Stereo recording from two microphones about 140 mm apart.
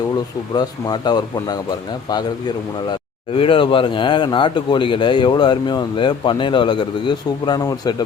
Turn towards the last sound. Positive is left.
turn(degrees=25)  # may be behind; listen again after turning